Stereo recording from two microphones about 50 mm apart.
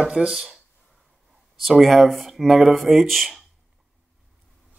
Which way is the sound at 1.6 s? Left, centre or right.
Centre.